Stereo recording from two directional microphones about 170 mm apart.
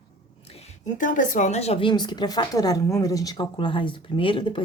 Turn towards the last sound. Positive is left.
turn(degrees=30)  # may be behind; listen again after turning